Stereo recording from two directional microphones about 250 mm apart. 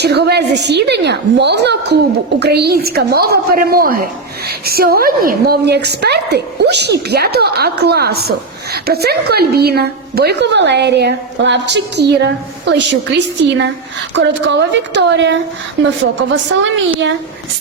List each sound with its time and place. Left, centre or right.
0.0 s a woman's voice: right